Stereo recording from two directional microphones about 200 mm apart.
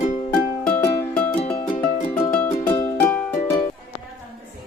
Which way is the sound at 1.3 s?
30° left (ahead or behind).